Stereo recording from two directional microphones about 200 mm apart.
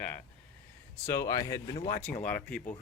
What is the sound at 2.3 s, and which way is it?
Speech, 5° left (ahead or behind).